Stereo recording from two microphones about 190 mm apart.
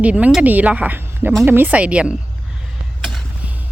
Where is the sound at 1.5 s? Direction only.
10° right (ahead or behind).